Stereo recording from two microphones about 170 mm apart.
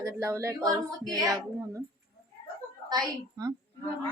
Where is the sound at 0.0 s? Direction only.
20° right (ahead or behind).